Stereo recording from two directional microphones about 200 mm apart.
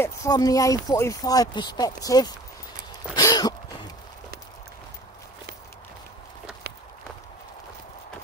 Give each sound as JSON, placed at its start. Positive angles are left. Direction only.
{"t": 0.0, "sound": "speech", "side_deg": 15}
{"t": 3.2, "sound": "a sound", "side_deg": 20}
{"t": 6.7, "sound": "walk", "side_deg": -50}